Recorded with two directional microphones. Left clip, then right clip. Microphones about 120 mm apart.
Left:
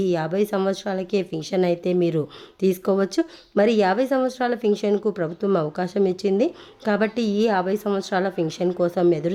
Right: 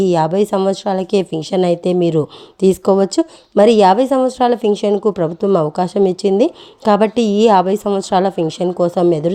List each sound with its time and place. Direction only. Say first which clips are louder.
0.0 s a woman's voice: right 8 dB; 45° right (ahead or behind)